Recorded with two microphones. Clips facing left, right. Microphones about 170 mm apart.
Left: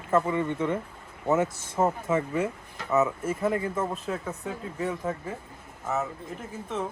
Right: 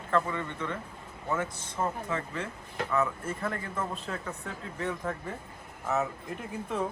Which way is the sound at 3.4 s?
10° left (ahead or behind).